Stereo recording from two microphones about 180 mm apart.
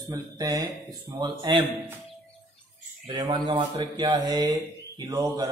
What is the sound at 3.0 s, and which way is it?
Speech, 25° right (ahead or behind).